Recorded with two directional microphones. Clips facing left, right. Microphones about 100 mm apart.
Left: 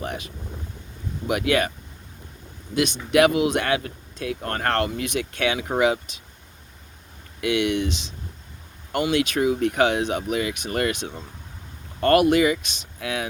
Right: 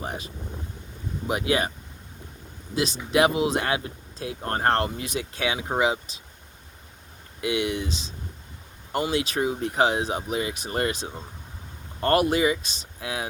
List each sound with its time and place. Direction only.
1.3 s speech: 30° right (ahead or behind)
2.7 s speech: 30° right (ahead or behind)
7.4 s speech: 30° right (ahead or behind)
8.9 s speech: 30° right (ahead or behind)